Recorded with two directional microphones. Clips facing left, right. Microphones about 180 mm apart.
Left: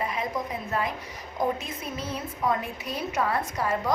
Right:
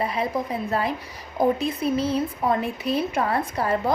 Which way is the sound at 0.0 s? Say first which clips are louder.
Right 5 dB; 35° right (ahead or behind).